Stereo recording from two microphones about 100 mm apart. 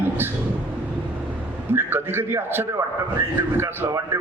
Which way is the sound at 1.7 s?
20° right (ahead or behind).